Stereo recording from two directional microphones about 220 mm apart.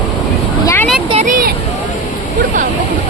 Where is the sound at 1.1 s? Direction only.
35° right (ahead or behind).